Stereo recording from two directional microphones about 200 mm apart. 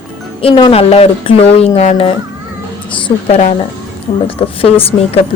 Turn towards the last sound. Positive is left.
turn(degrees=30)  # may be behind; listen again after turning